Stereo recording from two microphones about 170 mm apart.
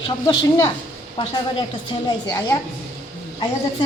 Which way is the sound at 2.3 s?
20° left (ahead or behind).